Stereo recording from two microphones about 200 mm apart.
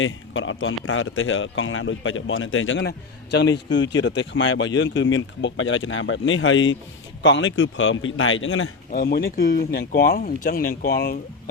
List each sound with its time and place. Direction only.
0.0 s a man's voice: 75° left (ahead or behind)
8.9 s speech: 45° left (ahead or behind)